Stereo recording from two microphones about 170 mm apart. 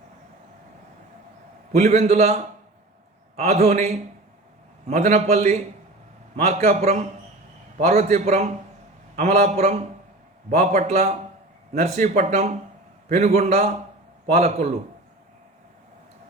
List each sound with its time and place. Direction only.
1.7 s a man's voice: 40° right (ahead or behind)